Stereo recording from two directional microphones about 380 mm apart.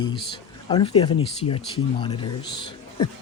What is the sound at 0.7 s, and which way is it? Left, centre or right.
Speech, centre.